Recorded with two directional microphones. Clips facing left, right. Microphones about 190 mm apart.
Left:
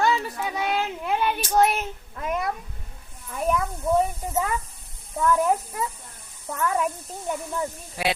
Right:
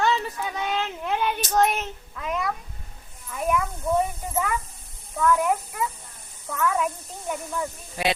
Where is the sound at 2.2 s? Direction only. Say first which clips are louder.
Left 1 dB; 45° left (ahead or behind).